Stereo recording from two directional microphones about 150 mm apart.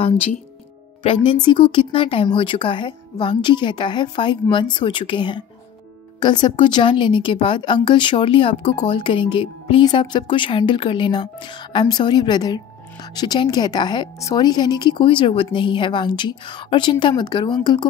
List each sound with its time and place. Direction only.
1.0 s speech: 30° left (ahead or behind)